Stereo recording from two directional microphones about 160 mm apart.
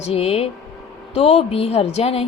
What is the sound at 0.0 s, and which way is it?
A woman's voice, 40° left (ahead or behind).